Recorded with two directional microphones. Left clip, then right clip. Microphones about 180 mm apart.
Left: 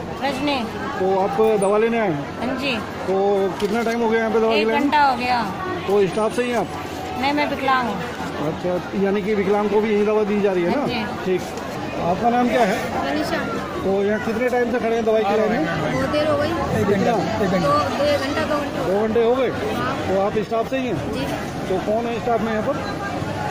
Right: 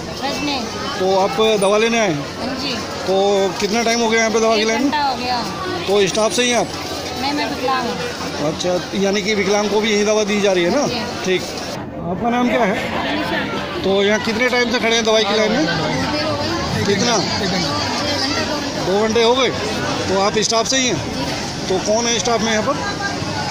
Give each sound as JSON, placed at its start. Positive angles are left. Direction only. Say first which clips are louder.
{"t": 1.4, "sound": "a man's voice", "louder": "right 1 dB", "side_deg": -10}
{"t": 3.3, "sound": "a man's voice", "louder": "right 3 dB", "side_deg": -10}
{"t": 4.7, "sound": "speech", "louder": "left 1 dB", "side_deg": 10}
{"t": 5.9, "sound": "speech", "louder": "right 3 dB", "side_deg": -5}
{"t": 7.2, "sound": "speech", "louder": "left 1 dB", "side_deg": 10}
{"t": 9.0, "sound": "a man's voice", "louder": "right 2 dB", "side_deg": -5}
{"t": 12.3, "sound": "speech", "louder": "right 2 dB", "side_deg": 0}
{"t": 13.9, "sound": "a man's voice", "louder": "right 5 dB", "side_deg": -10}
{"t": 19.1, "sound": "a man's voice", "louder": "right 4 dB", "side_deg": -10}